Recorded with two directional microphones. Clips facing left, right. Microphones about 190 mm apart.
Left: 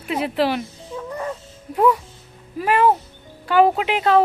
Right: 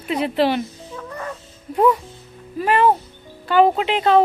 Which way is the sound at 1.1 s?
15° left (ahead or behind).